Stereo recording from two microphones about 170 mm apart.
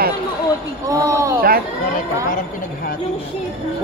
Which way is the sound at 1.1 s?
20° right (ahead or behind).